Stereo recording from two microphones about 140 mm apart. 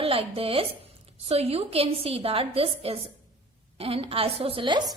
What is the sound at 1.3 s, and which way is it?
A woman's voice, 45° right (ahead or behind).